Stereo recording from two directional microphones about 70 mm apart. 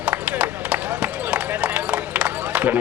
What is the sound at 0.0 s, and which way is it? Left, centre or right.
Run, centre.